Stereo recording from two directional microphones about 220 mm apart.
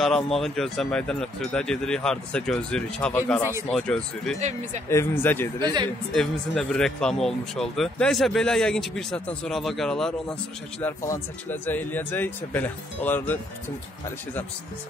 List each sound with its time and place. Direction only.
0.0 s speech: centre (ahead or behind)
4.4 s speech: 30° right (ahead or behind)
4.8 s speech: 10° left (ahead or behind)
5.6 s speech: 20° right (ahead or behind)
6.1 s speech: 5° left (ahead or behind)